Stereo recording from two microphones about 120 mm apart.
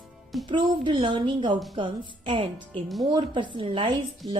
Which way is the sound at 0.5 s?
45° right (ahead or behind).